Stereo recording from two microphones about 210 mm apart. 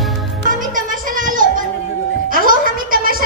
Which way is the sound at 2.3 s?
40° right (ahead or behind).